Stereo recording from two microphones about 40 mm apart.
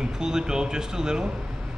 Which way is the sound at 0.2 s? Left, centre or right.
Centre.